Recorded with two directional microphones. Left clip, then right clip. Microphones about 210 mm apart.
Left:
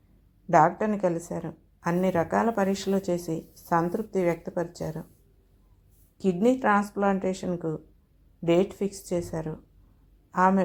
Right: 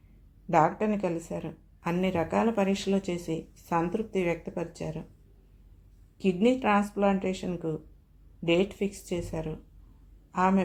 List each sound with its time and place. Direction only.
0.5 s a woman's voice: 20° left (ahead or behind)
6.1 s a woman's voice: 20° left (ahead or behind)